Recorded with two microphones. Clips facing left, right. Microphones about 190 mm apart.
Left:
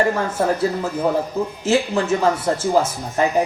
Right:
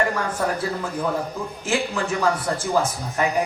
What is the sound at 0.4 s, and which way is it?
A man's voice, 25° left (ahead or behind).